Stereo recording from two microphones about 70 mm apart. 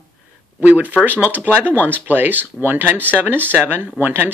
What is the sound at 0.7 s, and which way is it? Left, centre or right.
Speech, right.